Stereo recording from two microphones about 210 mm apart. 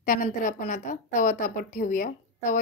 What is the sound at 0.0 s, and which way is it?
A woman's voice, 40° left (ahead or behind).